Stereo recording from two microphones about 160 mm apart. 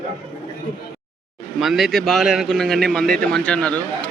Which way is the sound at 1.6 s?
Centre (ahead or behind).